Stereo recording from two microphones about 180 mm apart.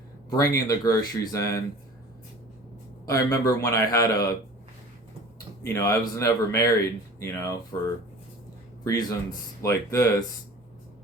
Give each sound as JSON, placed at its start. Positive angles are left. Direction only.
{"t": 0.3, "sound": "speech", "side_deg": 20}
{"t": 3.1, "sound": "a man's voice", "side_deg": 15}
{"t": 5.6, "sound": "a man's voice", "side_deg": 15}
{"t": 8.8, "sound": "a man's voice", "side_deg": 20}